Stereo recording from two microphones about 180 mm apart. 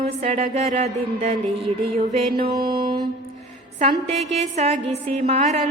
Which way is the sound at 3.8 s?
35° right (ahead or behind).